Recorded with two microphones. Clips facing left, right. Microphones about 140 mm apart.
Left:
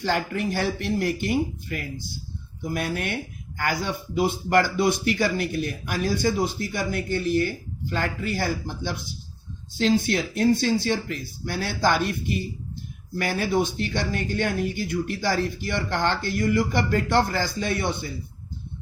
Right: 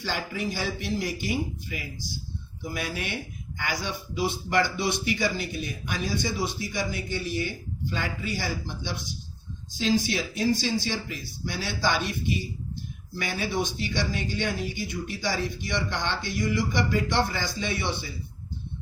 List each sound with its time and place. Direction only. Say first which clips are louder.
0.0 s speech: left 5 dB; 65° left (ahead or behind)
10.0 s speech: left 5 dB; 55° left (ahead or behind)
13.1 s speech: left 5 dB; 55° left (ahead or behind)